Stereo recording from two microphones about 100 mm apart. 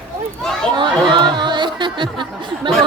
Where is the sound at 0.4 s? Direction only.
5° left (ahead or behind).